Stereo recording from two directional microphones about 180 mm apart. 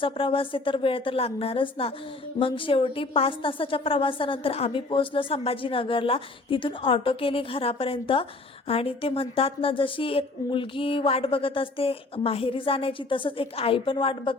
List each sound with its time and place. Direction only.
0.0 s a woman's voice: 30° left (ahead or behind)